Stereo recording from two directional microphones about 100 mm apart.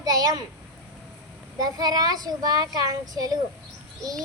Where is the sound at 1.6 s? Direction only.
40° right (ahead or behind).